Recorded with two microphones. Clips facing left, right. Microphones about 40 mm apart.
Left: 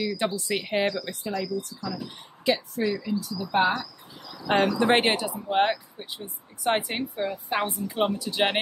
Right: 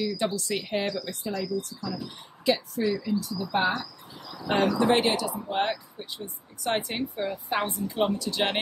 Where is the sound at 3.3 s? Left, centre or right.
Left.